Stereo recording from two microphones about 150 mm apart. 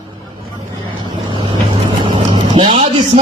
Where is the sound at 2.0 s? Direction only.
35° right (ahead or behind).